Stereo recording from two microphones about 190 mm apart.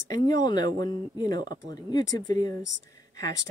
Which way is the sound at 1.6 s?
40° right (ahead or behind).